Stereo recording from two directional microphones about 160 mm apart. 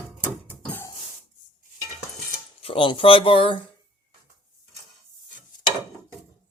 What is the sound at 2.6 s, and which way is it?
Speech, 35° left (ahead or behind).